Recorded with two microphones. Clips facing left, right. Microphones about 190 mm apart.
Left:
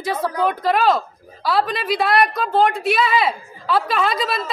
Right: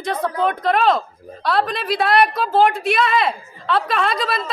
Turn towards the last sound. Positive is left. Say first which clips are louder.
# even
turn(degrees=0)  # may be behind; listen again after turning